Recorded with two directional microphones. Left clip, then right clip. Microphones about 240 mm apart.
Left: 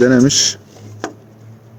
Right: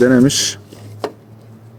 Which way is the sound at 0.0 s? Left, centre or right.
Centre.